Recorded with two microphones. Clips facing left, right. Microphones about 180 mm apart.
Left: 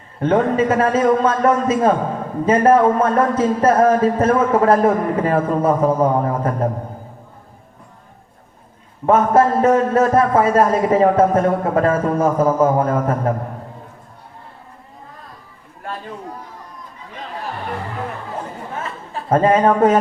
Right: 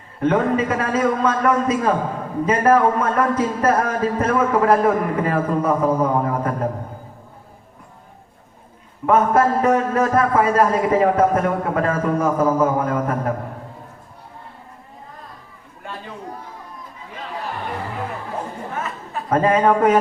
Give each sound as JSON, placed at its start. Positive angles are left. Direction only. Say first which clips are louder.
{"t": 0.2, "sound": "a man's voice", "louder": "left 2 dB", "side_deg": 30}
{"t": 9.0, "sound": "a man's voice", "louder": "left 2 dB", "side_deg": 30}
{"t": 18.8, "sound": "a sound", "louder": "even", "side_deg": 30}